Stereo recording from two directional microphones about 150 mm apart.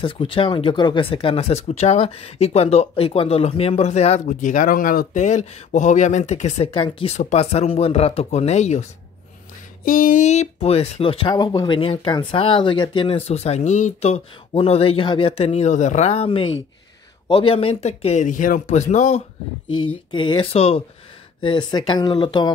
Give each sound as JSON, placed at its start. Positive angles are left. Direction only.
{"t": 0.0, "sound": "speech", "side_deg": 35}
{"t": 4.3, "sound": "speech", "side_deg": 60}
{"t": 6.7, "sound": "speech", "side_deg": 35}
{"t": 7.2, "sound": "speech", "side_deg": 50}
{"t": 9.8, "sound": "speech", "side_deg": 60}
{"t": 20.1, "sound": "speech", "side_deg": 30}